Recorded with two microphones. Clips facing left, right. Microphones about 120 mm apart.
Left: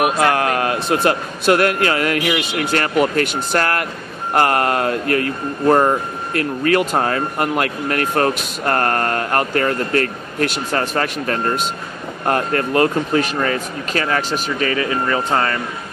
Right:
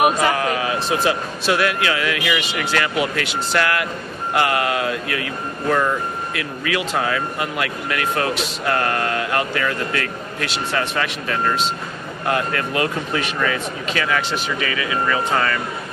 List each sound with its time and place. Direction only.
0.2 s speech: 65° left (ahead or behind); by 15.6 s 35° left (ahead or behind)